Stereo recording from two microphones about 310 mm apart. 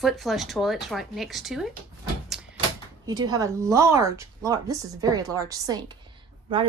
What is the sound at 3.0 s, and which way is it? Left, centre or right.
A woman's voice, centre.